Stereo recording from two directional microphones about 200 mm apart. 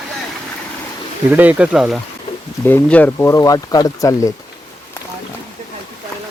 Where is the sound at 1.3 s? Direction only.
10° right (ahead or behind).